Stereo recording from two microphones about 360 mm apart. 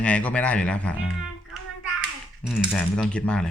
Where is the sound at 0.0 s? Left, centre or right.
Centre.